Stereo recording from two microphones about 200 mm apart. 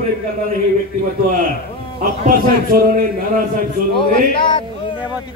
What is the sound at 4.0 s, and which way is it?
Speech, 25° left (ahead or behind).